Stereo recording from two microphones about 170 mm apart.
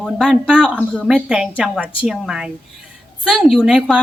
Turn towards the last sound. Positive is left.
turn(degrees=-5)  # may be behind; listen again after turning